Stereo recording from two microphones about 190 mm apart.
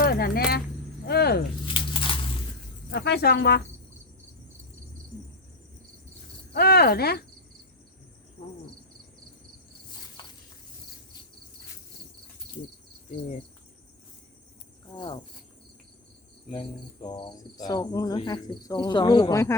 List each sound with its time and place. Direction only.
0.0 s a sound: 55° left (ahead or behind)
1.6 s a sound: 25° left (ahead or behind)
2.9 s speech: 60° left (ahead or behind)
6.5 s speech: 55° left (ahead or behind)
14.9 s cricket: 25° left (ahead or behind)
16.5 s cricket: 25° left (ahead or behind)